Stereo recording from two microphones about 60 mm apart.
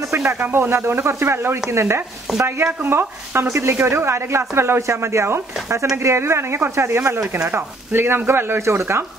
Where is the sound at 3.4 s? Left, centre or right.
Right.